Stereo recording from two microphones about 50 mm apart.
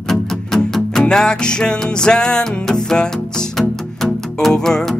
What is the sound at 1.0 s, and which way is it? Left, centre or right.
Music, centre.